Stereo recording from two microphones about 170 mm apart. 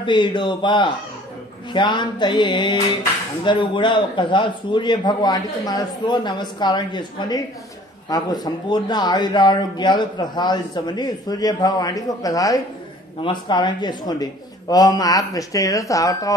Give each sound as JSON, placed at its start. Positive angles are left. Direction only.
{"t": 0.0, "sound": "speech", "side_deg": 25}